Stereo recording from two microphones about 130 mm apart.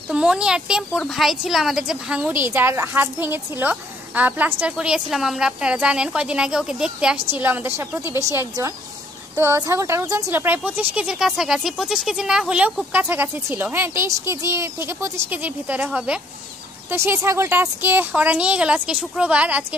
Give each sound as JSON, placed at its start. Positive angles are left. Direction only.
{"t": 0.1, "sound": "a woman's voice", "side_deg": -5}
{"t": 16.9, "sound": "speech", "side_deg": -20}